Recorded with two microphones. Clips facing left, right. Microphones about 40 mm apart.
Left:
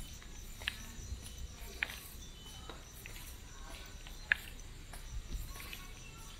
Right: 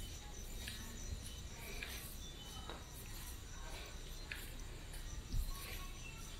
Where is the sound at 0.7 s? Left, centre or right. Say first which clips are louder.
Left 11 dB; left.